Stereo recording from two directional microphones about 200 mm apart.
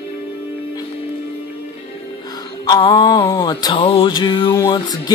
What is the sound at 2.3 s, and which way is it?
Music, 20° left (ahead or behind).